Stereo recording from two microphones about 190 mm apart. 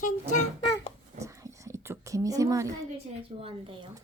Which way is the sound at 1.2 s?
15° right (ahead or behind).